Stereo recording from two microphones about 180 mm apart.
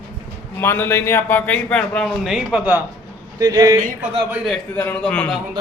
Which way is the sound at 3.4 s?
20° right (ahead or behind).